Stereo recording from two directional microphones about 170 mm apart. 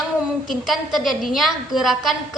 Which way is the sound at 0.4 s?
Centre (ahead or behind).